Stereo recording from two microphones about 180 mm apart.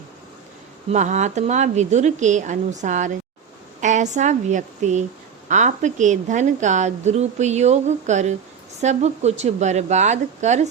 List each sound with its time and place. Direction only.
0.9 s a woman's voice: 40° right (ahead or behind)